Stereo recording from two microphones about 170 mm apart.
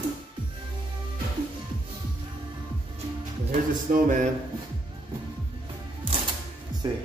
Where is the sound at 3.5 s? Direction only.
50° right (ahead or behind).